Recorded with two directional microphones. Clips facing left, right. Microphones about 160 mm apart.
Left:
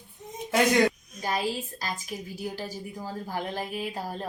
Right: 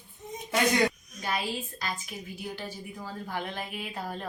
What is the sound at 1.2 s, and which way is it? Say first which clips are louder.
Speech: even; 35° left (ahead or behind).